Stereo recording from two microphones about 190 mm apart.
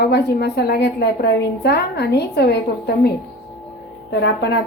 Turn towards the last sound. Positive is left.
turn(degrees=65)  # may be behind; listen again after turning